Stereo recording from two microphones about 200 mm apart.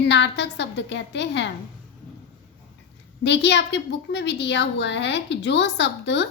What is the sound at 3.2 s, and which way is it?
A woman's voice, 60° left (ahead or behind).